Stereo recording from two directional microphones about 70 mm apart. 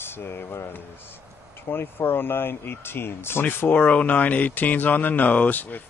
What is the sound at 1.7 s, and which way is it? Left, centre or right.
Speech, left.